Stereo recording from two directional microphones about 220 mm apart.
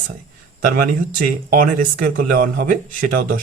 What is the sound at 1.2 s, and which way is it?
Speech, 40° right (ahead or behind).